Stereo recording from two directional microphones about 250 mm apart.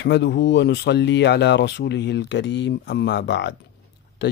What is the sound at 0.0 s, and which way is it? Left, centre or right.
Speech, left.